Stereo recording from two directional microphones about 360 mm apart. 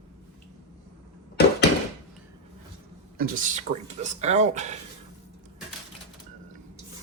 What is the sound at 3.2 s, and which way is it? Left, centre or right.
Speech, right.